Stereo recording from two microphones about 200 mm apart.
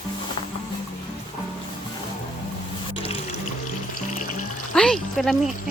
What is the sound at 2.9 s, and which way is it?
Music, 30° left (ahead or behind).